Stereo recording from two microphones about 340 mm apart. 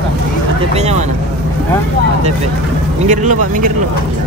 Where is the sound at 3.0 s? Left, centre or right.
Right.